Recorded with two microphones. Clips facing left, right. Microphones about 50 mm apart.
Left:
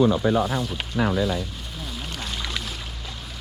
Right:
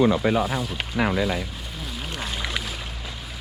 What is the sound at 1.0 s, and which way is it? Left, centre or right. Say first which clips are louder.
Speech: even; right.